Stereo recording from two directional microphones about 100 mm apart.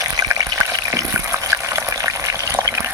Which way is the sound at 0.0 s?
35° right (ahead or behind).